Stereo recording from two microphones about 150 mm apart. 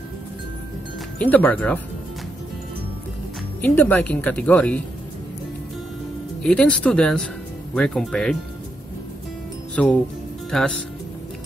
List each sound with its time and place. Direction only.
1.2 s speech: 10° left (ahead or behind)
3.6 s speech: 10° left (ahead or behind)
6.4 s speech: 5° left (ahead or behind)
9.8 s speech: 5° left (ahead or behind)